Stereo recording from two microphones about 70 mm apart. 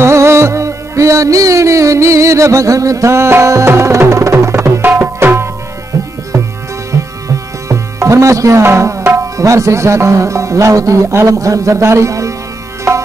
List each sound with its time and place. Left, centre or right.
0.0 s music: right
4.8 s tabla: right
7.6 s tabla: right